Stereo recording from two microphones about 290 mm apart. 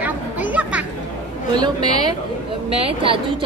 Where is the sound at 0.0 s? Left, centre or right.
Centre.